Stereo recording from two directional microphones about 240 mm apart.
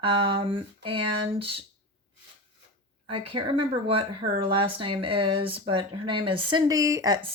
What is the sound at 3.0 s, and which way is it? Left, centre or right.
Speech, right.